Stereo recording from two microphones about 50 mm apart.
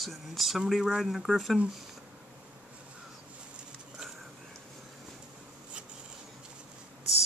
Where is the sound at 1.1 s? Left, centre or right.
Centre.